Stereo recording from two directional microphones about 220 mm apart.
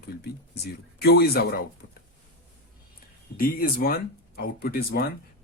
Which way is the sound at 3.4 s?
40° left (ahead or behind).